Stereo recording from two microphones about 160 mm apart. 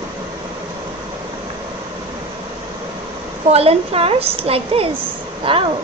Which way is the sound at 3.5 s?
40° right (ahead or behind).